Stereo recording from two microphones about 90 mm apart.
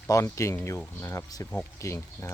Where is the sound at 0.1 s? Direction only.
35° left (ahead or behind).